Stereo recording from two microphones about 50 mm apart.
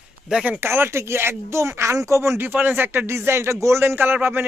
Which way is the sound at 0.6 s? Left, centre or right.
Right.